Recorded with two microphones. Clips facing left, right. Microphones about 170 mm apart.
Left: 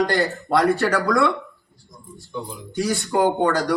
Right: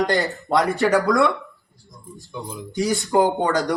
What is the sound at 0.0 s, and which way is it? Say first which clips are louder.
Speech: even; 20° right (ahead or behind).